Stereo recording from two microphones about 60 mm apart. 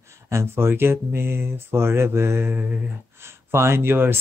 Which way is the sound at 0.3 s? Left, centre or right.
Right.